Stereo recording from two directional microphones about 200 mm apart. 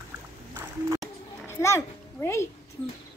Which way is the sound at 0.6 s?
15° right (ahead or behind).